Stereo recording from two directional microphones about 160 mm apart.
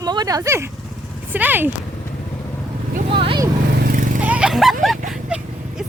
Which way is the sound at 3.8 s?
65° right (ahead or behind).